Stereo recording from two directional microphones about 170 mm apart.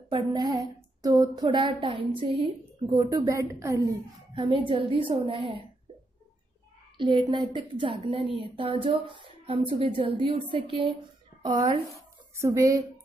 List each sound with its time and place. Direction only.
0.1 s a woman's voice: 25° right (ahead or behind)
4.3 s speech: 30° right (ahead or behind)
7.0 s a woman's voice: 25° right (ahead or behind)
12.4 s a woman's voice: 15° right (ahead or behind)